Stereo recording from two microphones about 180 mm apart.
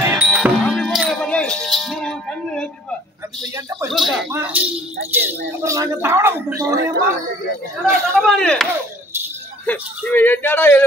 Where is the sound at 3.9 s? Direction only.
Centre (ahead or behind); by 6.8 s 20° right (ahead or behind).